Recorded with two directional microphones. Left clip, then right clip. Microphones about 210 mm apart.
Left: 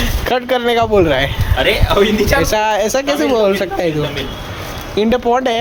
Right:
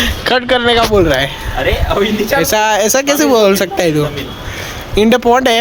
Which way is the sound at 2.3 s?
15° right (ahead or behind).